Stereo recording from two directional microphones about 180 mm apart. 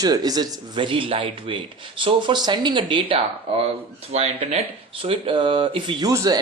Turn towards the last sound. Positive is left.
turn(degrees=-20)  # may be behind; listen again after turning